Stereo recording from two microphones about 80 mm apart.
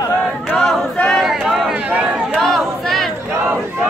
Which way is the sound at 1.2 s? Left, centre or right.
Centre.